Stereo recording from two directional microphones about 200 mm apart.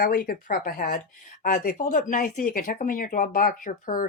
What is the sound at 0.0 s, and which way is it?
Speech, 45° left (ahead or behind).